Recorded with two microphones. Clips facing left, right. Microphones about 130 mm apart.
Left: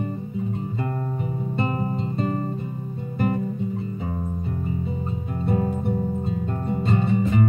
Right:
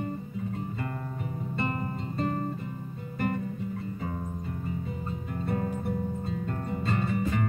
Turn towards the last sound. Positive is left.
turn(degrees=20)  # may be behind; listen again after turning